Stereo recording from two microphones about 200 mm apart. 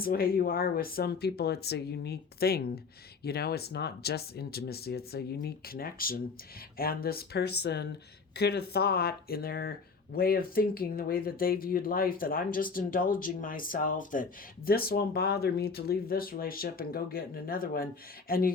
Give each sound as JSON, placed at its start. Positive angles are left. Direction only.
{"t": 0.0, "sound": "speech", "side_deg": 50}